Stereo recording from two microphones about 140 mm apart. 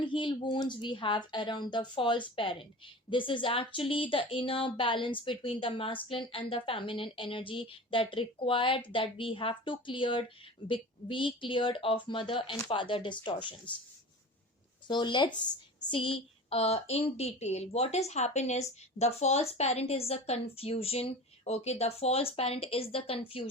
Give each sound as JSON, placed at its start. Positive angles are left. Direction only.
{"t": 0.0, "sound": "speech", "side_deg": 35}
{"t": 14.8, "sound": "a woman's voice", "side_deg": 35}